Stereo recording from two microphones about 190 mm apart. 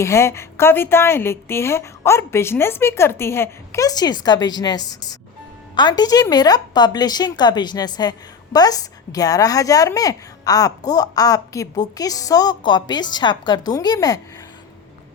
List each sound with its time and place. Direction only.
0.0 s a woman's voice: 15° left (ahead or behind)